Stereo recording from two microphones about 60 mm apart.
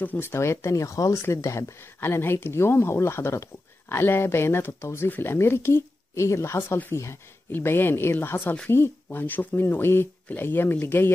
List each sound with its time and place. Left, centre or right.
0.2 s speech: left
1.3 s speech: left
2.0 s speech: left
7.5 s speech: left